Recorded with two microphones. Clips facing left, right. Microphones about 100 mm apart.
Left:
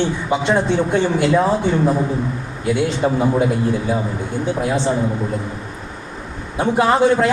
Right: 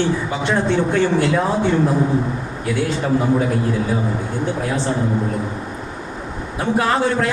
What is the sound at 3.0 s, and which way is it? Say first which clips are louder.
Speech: even; 20° left (ahead or behind).